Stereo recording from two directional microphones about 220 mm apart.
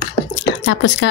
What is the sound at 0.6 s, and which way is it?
Speech, 60° left (ahead or behind).